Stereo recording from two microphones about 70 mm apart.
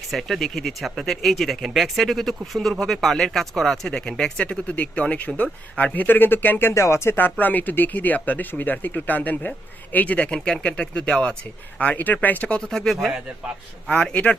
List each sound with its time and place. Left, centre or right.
0.1 s speech: centre; by 6.7 s left
6.7 s speech: left
12.7 s speech: centre